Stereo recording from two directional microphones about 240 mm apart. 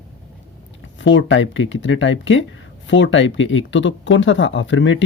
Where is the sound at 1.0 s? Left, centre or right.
Left.